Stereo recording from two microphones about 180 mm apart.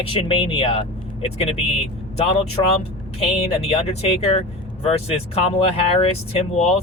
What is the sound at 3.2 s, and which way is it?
Speech, 35° left (ahead or behind).